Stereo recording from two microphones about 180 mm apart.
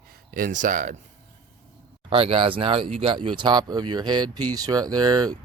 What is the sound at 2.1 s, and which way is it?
Speech, 30° right (ahead or behind).